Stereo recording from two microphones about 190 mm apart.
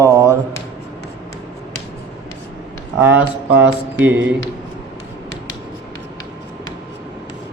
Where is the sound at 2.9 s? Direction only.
10° right (ahead or behind).